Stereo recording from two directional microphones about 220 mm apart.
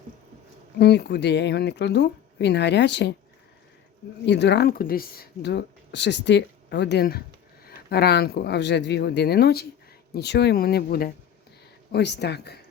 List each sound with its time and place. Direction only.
0.8 s speech: 50° left (ahead or behind)
4.3 s speech: 50° left (ahead or behind)